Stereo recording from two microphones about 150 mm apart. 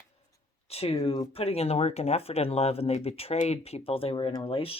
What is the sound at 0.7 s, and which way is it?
Speech, 40° left (ahead or behind).